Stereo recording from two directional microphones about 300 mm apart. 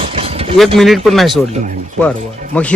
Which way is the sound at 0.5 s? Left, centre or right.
Centre.